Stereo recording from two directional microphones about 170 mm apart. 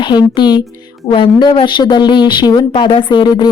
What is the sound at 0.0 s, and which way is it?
A woman's voice, 25° left (ahead or behind).